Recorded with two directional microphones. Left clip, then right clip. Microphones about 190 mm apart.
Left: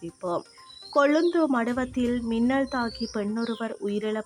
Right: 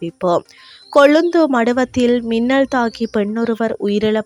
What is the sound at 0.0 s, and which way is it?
Speech, 40° right (ahead or behind).